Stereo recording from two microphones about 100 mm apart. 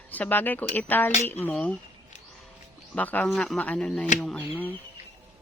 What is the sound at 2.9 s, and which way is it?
Speech, 15° left (ahead or behind).